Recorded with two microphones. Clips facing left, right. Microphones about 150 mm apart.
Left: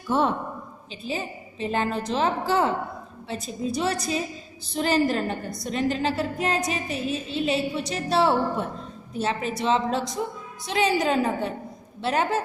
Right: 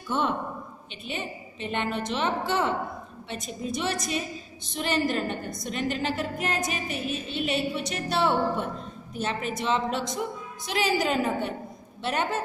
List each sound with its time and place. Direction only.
1.0 s a woman's voice: 30° left (ahead or behind)